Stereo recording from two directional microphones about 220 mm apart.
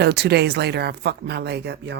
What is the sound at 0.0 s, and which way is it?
Speech, 50° right (ahead or behind).